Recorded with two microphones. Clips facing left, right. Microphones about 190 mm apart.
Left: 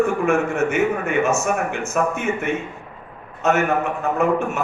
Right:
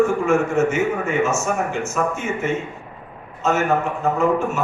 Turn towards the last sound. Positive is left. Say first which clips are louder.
# right 1 dB
turn(degrees=60)  # may be behind; listen again after turning